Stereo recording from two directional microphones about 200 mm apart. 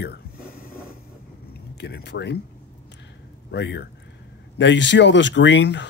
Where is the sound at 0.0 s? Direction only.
50° left (ahead or behind).